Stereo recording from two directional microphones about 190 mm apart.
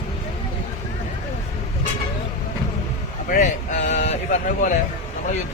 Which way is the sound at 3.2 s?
40° left (ahead or behind).